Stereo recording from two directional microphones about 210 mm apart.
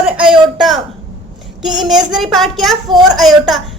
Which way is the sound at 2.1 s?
Centre (ahead or behind).